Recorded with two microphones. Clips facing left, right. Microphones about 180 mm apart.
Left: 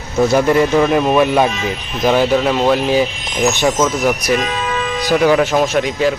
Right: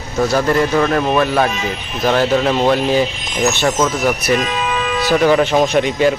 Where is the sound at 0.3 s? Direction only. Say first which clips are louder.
Left 2 dB; 20° left (ahead or behind); by 3.9 s centre (ahead or behind).